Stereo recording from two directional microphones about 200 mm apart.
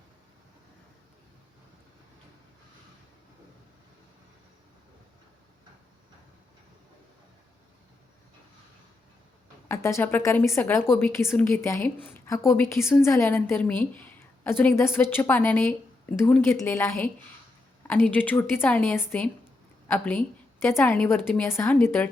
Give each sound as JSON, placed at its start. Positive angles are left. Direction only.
{"t": 9.6, "sound": "a woman's voice", "side_deg": 15}